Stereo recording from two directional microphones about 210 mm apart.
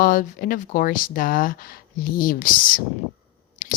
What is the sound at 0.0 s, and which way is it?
Speech, 40° left (ahead or behind).